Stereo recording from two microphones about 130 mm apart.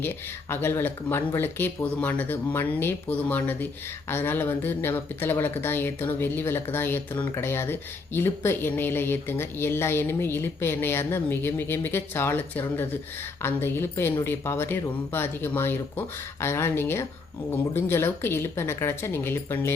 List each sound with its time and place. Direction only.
0.5 s a woman's voice: 15° left (ahead or behind)